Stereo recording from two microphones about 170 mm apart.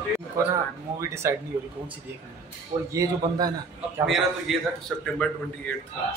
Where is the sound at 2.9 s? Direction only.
20° right (ahead or behind).